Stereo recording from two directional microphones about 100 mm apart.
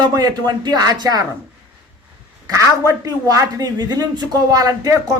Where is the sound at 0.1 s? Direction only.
45° right (ahead or behind).